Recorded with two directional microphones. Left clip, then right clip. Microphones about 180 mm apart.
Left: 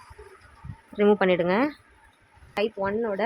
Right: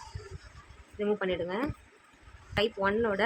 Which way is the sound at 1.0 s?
45° left (ahead or behind).